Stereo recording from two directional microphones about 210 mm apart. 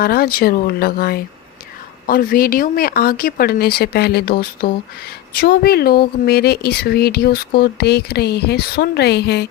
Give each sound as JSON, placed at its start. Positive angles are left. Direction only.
{"t": 0.0, "sound": "speech", "side_deg": 45}